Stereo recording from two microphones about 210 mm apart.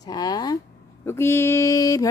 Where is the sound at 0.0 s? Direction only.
20° left (ahead or behind).